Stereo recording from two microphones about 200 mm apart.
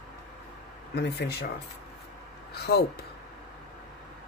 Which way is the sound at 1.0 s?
55° left (ahead or behind).